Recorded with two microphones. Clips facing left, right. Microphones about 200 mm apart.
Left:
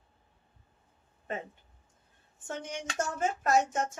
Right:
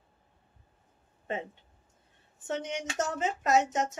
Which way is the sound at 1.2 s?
25° right (ahead or behind).